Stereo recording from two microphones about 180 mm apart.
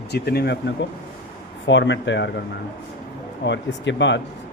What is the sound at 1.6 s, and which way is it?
Speech, 80° left.